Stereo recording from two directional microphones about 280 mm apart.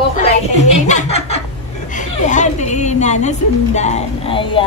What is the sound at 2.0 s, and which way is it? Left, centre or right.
A woman's voice, left.